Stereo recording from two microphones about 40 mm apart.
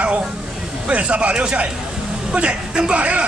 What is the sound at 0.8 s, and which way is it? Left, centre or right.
A man's voice, right.